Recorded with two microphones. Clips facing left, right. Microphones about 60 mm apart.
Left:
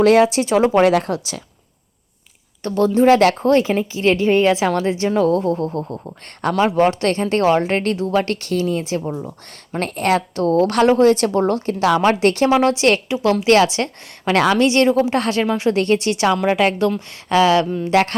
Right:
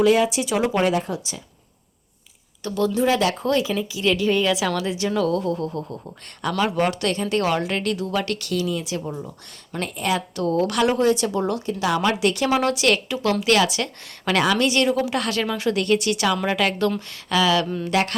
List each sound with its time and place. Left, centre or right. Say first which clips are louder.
0.0 s speech: left 5 dB; left
0.4 s a woman's voice: left 6 dB; left
0.8 s speech: left 7 dB; left
2.6 s speech: left 7 dB; left
6.5 s speech: left 5 dB; left
6.7 s speech: left 6 dB; left
9.8 s a woman's voice: left 6 dB; left
15.7 s speech: left 3 dB; left
17.2 s speech: left 6 dB; left
17.7 s a sound: left 4 dB; centre